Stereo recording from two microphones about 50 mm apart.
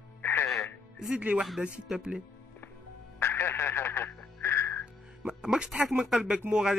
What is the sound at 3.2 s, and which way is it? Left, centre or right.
Radio, left.